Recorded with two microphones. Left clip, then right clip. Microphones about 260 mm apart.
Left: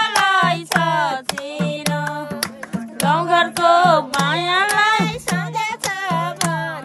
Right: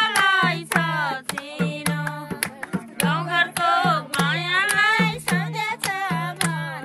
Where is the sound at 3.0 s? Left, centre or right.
Centre.